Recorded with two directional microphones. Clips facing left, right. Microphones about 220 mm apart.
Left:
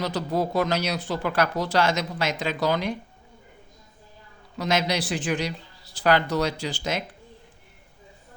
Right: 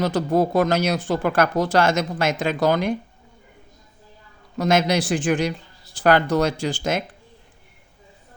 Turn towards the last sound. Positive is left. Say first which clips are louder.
# right 5 dB
turn(degrees=-50)  # may be behind; listen again after turning